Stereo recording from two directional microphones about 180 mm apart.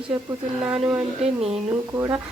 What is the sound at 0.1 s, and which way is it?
Speech, 10° right (ahead or behind).